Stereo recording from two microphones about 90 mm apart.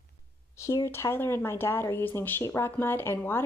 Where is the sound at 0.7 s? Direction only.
30° left (ahead or behind).